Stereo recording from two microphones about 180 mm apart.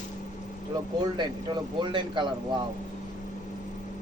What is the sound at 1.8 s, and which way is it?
Speech, 25° right (ahead or behind).